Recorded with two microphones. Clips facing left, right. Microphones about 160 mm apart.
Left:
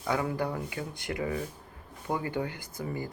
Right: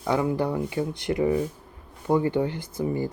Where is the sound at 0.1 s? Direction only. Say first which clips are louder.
Right 6 dB; 20° right (ahead or behind).